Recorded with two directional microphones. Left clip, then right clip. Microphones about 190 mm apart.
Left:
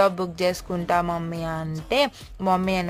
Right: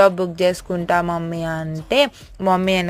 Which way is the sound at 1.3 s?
15° right (ahead or behind).